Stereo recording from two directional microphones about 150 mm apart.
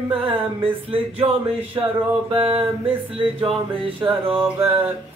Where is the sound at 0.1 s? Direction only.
35° right (ahead or behind).